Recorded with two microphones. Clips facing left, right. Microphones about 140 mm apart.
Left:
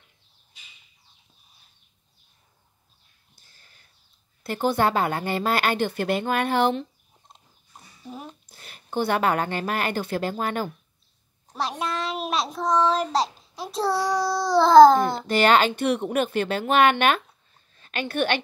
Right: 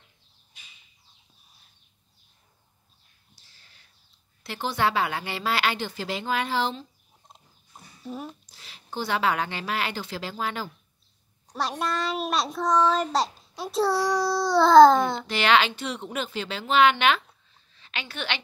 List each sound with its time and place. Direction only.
3.3 s a sound: 50° left (ahead or behind)
4.4 s a woman's voice: 50° left (ahead or behind)
7.7 s dog: centre (ahead or behind)
8.5 s a woman's voice: 55° left (ahead or behind)
11.4 s a child's voice: centre (ahead or behind)
15.2 s a woman's voice: 45° left (ahead or behind)